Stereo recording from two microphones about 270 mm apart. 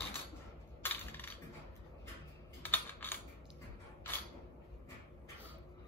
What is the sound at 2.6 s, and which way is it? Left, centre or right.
Typing, centre.